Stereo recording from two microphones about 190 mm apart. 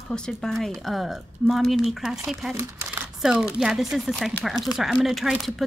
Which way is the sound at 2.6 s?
10° right (ahead or behind).